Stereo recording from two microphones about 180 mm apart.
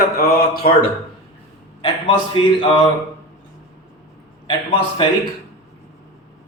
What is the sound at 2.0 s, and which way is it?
Speech, 25° left (ahead or behind).